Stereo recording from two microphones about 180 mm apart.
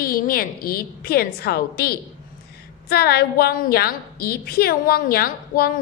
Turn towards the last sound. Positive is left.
turn(degrees=55)  # may be behind; listen again after turning